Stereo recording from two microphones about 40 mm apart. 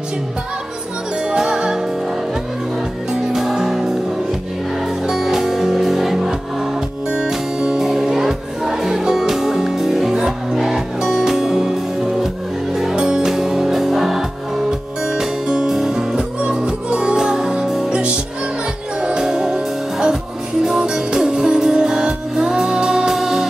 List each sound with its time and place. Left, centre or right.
1.3 s music: centre
3.3 s music: centre
5.0 s music: centre
12.9 s music: centre